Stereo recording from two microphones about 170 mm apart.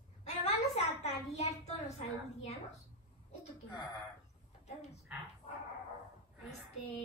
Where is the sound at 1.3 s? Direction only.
40° left (ahead or behind).